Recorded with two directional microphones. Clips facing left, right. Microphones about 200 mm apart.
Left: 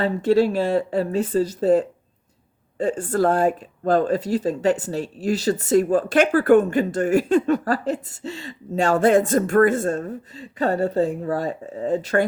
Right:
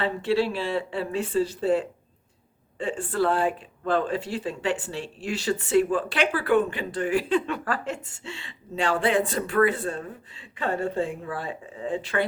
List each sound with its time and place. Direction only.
0.0 s speech: 40° left (ahead or behind)